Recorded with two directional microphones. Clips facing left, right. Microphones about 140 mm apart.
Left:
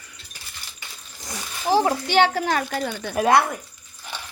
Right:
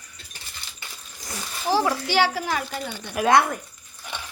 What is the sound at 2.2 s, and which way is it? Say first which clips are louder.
Speech: left 5 dB; 55° left (ahead or behind).